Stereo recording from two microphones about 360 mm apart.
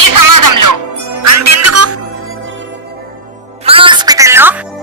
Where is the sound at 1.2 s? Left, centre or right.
Right.